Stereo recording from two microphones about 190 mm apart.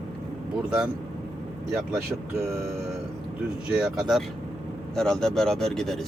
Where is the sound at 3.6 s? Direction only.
5° right (ahead or behind).